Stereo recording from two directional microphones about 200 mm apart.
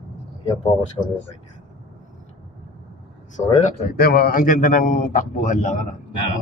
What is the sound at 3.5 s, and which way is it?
Speech, 35° left (ahead or behind).